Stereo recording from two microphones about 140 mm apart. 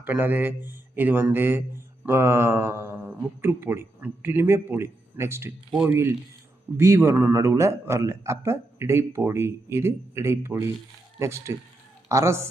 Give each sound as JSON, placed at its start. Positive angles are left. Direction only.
{"t": 0.0, "sound": "speech", "side_deg": -15}
{"t": 5.7, "sound": "speech", "side_deg": -5}
{"t": 6.7, "sound": "a woman's voice", "side_deg": -20}